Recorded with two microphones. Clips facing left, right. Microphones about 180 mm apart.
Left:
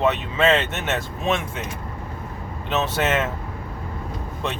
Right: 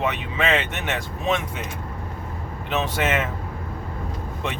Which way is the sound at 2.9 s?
15° right (ahead or behind).